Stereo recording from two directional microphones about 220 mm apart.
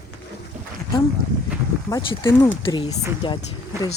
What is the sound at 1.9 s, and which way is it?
Speech, 15° left (ahead or behind).